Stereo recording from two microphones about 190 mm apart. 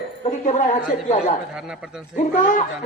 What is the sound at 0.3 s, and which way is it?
A woman's voice, 40° left (ahead or behind).